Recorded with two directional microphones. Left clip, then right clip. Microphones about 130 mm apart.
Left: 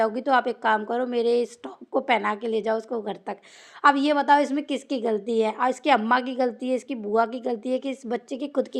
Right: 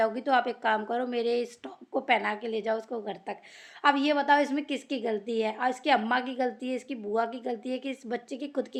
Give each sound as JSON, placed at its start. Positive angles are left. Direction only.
{"t": 0.0, "sound": "a woman's voice", "side_deg": 20}